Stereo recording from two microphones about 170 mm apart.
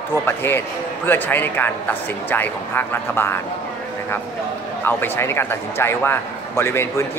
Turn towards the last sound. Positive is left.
turn(degrees=15)  # may be behind; listen again after turning